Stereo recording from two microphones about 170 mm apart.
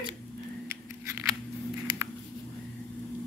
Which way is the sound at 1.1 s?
15° right (ahead or behind).